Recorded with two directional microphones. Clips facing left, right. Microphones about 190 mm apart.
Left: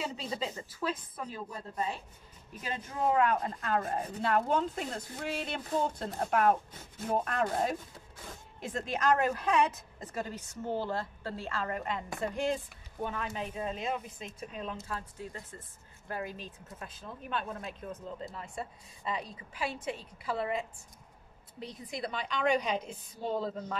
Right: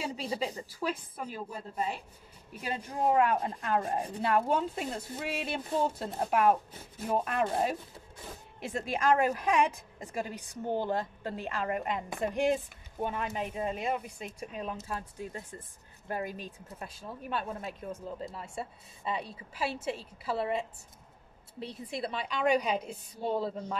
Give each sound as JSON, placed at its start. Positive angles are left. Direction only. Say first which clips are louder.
{"t": 0.0, "sound": "a sound", "louder": "right 2 dB", "side_deg": -10}
{"t": 0.6, "sound": "a woman's voice", "louder": "right 1 dB", "side_deg": -10}
{"t": 2.8, "sound": "speech", "louder": "right 2 dB", "side_deg": -35}
{"t": 3.4, "sound": "a woman's voice", "louder": "right 1 dB", "side_deg": -15}
{"t": 8.6, "sound": "a woman's voice", "louder": "right 1 dB", "side_deg": -10}
{"t": 16.3, "sound": "a woman's voice", "louder": "right 2 dB", "side_deg": -10}
{"t": 20.2, "sound": "a woman's voice", "louder": "right 2 dB", "side_deg": -30}
{"t": 22.1, "sound": "a woman's voice", "louder": "right 2 dB", "side_deg": -5}